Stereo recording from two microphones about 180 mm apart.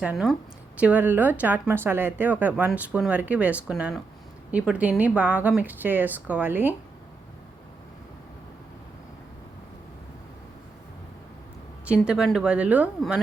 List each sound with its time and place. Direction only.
0.0 s speech: 5° right (ahead or behind)
11.9 s speech: 5° right (ahead or behind)